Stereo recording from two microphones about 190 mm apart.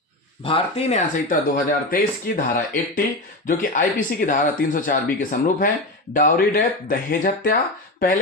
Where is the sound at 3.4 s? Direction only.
45° left (ahead or behind).